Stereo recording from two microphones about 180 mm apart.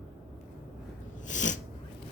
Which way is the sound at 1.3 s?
45° left (ahead or behind).